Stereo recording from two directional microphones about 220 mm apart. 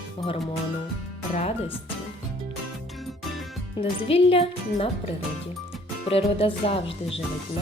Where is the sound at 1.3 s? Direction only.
30° left (ahead or behind).